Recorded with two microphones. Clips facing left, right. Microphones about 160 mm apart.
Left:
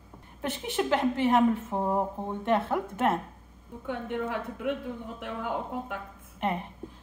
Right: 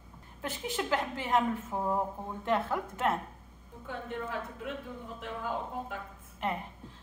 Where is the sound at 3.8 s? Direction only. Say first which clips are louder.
Left 6 dB; 70° left (ahead or behind).